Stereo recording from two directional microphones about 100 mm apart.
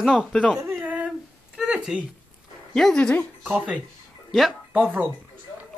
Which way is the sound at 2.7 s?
5° left (ahead or behind).